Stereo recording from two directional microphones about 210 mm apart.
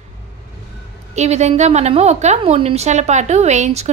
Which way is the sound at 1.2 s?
30° right (ahead or behind).